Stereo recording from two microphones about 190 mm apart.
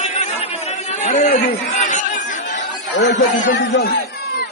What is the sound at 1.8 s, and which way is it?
Chatter, 40° left (ahead or behind).